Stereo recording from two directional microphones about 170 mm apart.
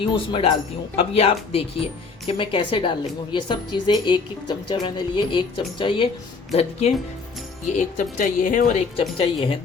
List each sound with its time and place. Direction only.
0.0 s speech: 30° left (ahead or behind)
6.5 s speech: 40° left (ahead or behind)
9.1 s speech: 30° left (ahead or behind)